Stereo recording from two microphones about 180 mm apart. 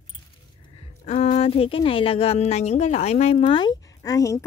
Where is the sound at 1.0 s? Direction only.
30° left (ahead or behind).